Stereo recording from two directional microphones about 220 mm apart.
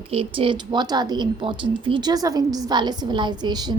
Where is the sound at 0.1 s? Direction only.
25° right (ahead or behind).